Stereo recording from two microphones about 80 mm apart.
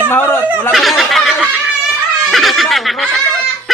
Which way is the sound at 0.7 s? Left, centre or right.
Centre.